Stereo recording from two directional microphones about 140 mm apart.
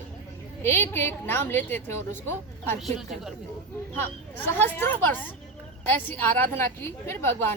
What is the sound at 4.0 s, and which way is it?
A woman's voice, 15° left (ahead or behind).